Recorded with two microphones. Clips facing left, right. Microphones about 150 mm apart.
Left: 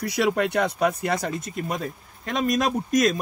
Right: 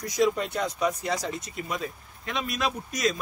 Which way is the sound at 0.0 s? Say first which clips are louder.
Left 2 dB; 70° left (ahead or behind).